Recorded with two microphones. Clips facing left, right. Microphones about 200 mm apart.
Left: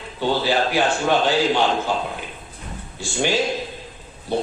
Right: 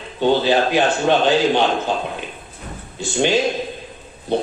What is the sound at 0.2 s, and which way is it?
Speech, 20° right (ahead or behind).